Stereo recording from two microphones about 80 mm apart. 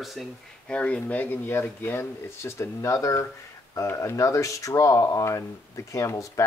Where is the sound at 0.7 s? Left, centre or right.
Centre; by 6.4 s left.